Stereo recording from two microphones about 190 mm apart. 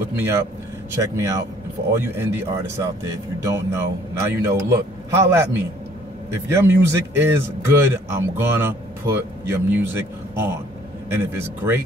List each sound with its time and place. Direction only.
0.1 s speech: 15° right (ahead or behind)